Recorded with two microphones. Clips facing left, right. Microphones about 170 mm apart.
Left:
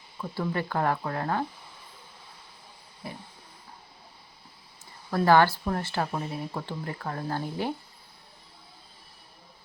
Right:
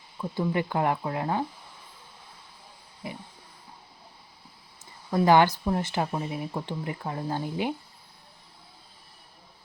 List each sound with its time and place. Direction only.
0.2 s speech: 15° right (ahead or behind)
3.0 s a sound: 20° right (ahead or behind)
5.1 s speech: 15° right (ahead or behind)